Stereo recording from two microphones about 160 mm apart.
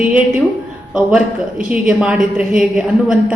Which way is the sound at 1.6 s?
5° right (ahead or behind).